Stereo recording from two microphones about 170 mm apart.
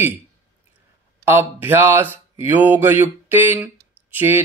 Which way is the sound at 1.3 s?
15° right (ahead or behind).